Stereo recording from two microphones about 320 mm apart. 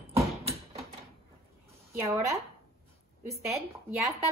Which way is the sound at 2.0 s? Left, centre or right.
Centre.